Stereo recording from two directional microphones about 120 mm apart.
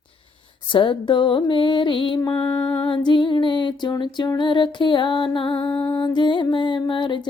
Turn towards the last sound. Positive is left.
turn(degrees=45)  # may be behind; listen again after turning